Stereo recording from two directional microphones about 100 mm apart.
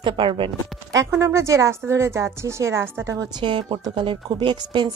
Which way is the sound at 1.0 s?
25° right (ahead or behind).